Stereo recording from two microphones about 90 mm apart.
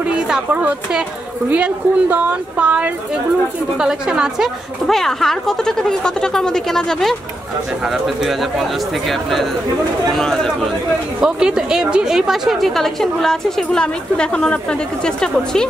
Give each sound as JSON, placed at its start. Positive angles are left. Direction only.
{"t": 0.1, "sound": "a woman's voice", "side_deg": -15}
{"t": 4.8, "sound": "a woman's voice", "side_deg": 5}
{"t": 10.1, "sound": "a woman's voice", "side_deg": 5}
{"t": 11.1, "sound": "a woman's voice", "side_deg": -5}